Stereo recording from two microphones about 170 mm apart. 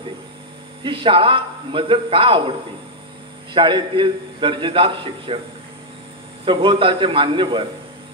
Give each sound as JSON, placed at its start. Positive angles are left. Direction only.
{"t": 0.8, "sound": "a man's voice", "side_deg": -30}
{"t": 3.5, "sound": "a man's voice", "side_deg": -30}
{"t": 6.4, "sound": "a man's voice", "side_deg": -30}